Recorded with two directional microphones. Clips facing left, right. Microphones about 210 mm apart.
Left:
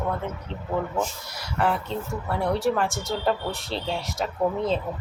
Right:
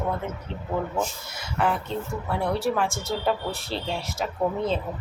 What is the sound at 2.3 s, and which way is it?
Speech, centre (ahead or behind).